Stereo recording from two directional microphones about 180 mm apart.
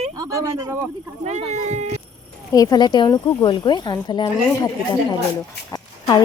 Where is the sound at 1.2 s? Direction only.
40° right (ahead or behind).